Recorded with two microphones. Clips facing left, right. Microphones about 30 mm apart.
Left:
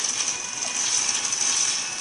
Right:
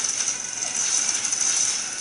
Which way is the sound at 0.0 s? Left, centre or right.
Left.